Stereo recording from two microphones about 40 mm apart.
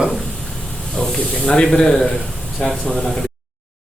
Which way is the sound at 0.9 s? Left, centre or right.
Centre.